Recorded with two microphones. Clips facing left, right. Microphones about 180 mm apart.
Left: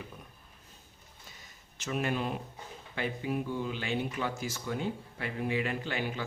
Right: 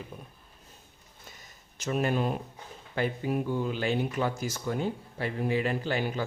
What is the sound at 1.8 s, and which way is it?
Speech, 40° right (ahead or behind).